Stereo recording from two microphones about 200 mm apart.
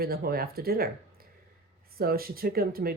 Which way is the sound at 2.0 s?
50° right (ahead or behind).